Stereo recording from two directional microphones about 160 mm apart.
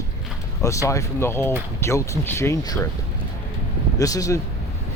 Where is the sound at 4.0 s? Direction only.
20° left (ahead or behind).